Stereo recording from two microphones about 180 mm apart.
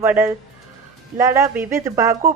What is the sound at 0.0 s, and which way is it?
Speech, 10° right (ahead or behind).